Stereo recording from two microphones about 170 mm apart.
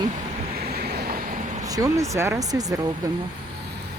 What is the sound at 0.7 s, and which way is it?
Vehicle, 70° right (ahead or behind).